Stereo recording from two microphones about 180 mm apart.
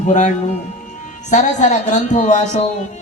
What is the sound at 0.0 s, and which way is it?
Speech, 40° left (ahead or behind).